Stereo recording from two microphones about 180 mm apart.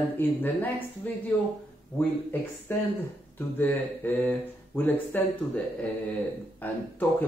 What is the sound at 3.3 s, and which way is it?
A man's voice, 10° left (ahead or behind).